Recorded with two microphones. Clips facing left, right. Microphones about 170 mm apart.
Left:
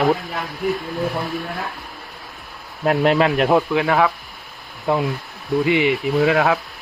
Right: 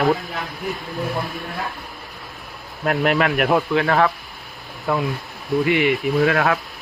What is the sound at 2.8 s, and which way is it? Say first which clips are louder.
Speech: left 3 dB; 25° left (ahead or behind).